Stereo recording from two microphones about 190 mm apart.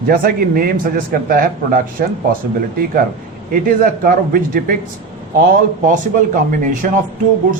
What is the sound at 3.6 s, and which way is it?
A man's voice, 50° right (ahead or behind).